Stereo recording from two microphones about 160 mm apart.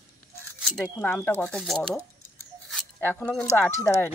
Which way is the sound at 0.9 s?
10° left (ahead or behind).